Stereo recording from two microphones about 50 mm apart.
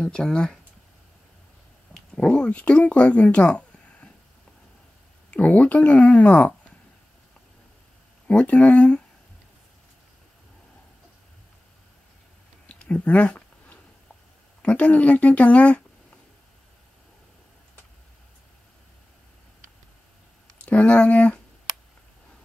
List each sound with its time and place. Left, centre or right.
0.0 s speech: centre
2.1 s speech: centre
5.3 s speech: left
8.3 s speech: left
12.6 s a sound: left
14.6 s speech: left
20.6 s speech: left